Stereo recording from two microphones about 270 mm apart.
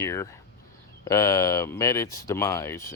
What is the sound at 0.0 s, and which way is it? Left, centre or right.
Speech, centre.